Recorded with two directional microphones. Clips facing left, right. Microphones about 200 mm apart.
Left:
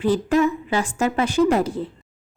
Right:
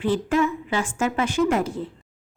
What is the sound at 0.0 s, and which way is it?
A woman's voice, 40° left (ahead or behind).